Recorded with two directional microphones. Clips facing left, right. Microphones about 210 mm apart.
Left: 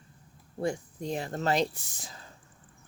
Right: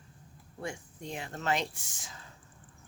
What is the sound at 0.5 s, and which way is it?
Speech, 35° left (ahead or behind).